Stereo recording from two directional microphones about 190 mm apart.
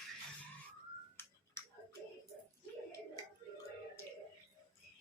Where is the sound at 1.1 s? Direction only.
15° left (ahead or behind).